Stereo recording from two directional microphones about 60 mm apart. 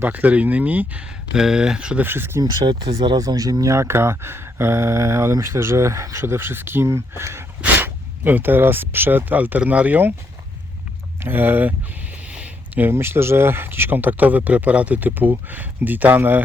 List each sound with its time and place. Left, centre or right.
0.0 s speech: right
1.3 s speech: centre
2.0 s speech: right
3.2 s speech: right
7.6 s speech: right
11.2 s speech: right
12.3 s a sound: right
12.9 s speech: right